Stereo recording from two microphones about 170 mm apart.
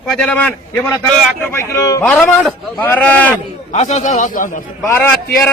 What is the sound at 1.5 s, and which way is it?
Speech, 15° left (ahead or behind).